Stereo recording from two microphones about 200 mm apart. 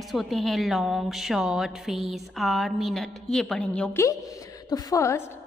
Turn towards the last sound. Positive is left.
turn(degrees=15)  # may be behind; listen again after turning